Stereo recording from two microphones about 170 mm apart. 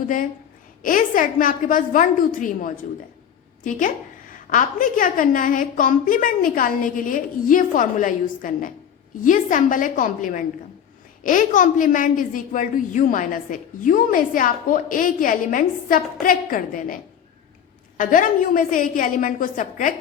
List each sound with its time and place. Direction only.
0.8 s a woman's voice: 55° left (ahead or behind)